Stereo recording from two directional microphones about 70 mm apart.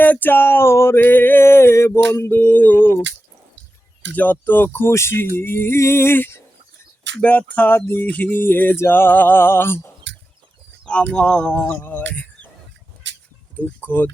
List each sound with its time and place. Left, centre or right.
0.0 s speech: left
4.1 s speech: left
7.2 s music: left
7.8 s speech: left
10.8 s speech: centre
11.8 s speech: left
13.6 s music: left